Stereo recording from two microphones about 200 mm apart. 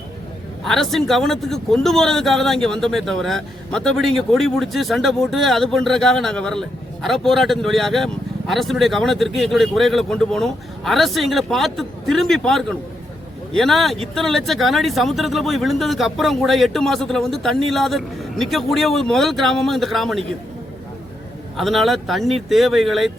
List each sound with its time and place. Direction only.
0.6 s speech: centre (ahead or behind)
21.6 s speech: centre (ahead or behind)